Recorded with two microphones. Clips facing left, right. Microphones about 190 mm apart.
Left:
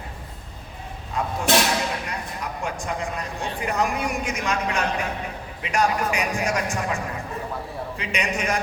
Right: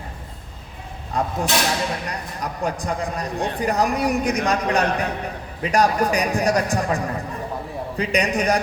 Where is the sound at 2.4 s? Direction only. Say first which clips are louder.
Right 6 dB; 35° right (ahead or behind).